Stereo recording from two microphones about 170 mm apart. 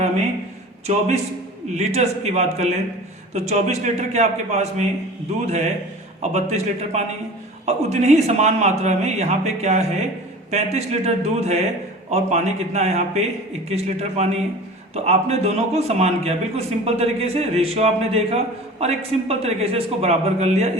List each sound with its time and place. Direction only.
0.9 s a man's voice: 40° right (ahead or behind)